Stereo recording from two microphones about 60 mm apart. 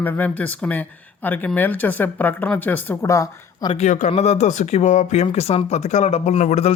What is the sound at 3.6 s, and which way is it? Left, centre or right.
Speech, left.